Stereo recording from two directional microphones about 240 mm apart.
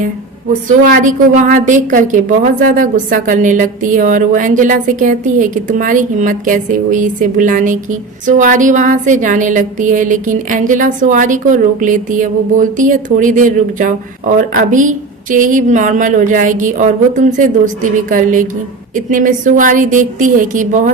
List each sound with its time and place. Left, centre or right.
0.9 s a woman's voice: right